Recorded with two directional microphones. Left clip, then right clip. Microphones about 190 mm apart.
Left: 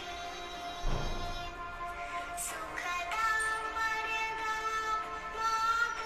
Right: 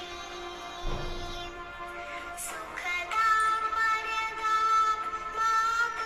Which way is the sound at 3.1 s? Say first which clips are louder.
Right 8 dB; 35° right (ahead or behind).